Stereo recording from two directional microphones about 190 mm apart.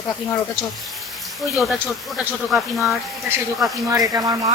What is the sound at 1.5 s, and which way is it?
A woman's voice, centre (ahead or behind).